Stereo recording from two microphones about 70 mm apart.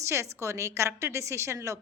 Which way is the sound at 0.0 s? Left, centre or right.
Right.